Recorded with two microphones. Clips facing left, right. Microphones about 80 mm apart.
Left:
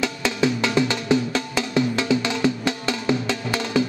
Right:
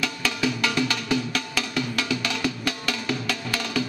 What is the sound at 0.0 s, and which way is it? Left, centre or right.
Music, left.